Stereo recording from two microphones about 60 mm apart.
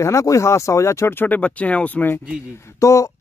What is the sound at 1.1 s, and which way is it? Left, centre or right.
Speech, left.